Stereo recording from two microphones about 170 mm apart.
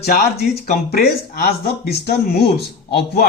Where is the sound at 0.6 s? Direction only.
65° left (ahead or behind).